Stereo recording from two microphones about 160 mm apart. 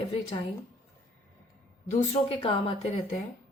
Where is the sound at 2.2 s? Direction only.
35° left (ahead or behind).